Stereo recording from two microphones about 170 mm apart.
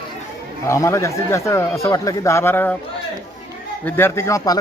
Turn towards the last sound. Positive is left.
turn(degrees=20)  # may be behind; listen again after turning